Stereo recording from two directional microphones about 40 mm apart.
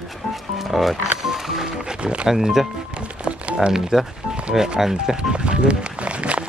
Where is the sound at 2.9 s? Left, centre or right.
Right.